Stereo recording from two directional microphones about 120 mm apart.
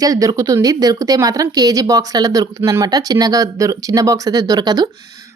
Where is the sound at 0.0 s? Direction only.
30° right (ahead or behind).